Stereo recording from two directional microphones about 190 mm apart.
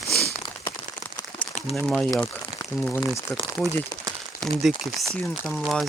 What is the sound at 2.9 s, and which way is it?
Speech, 20° left (ahead or behind).